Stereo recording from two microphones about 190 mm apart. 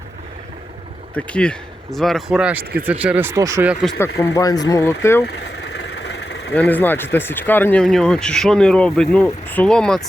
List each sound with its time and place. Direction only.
1.1 s speech: 5° left (ahead or behind)
3.9 s speech: 15° left (ahead or behind)
5.2 s vehicle: 60° left (ahead or behind)
6.5 s speech: 10° left (ahead or behind)